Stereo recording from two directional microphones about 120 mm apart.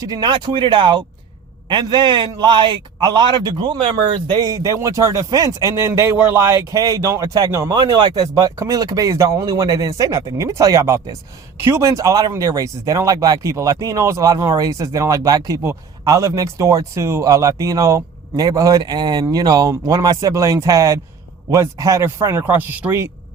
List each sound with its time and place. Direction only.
0.0 s a man's voice: 35° right (ahead or behind)
4.4 s speech: 30° right (ahead or behind)